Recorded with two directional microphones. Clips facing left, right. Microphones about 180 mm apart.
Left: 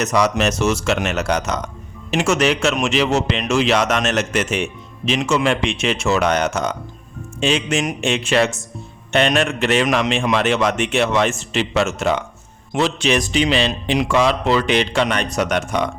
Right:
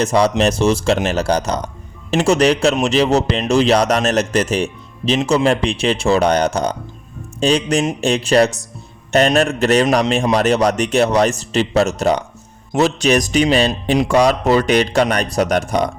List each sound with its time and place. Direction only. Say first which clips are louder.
0.0 s speech: right 3 dB; 30° right (ahead or behind)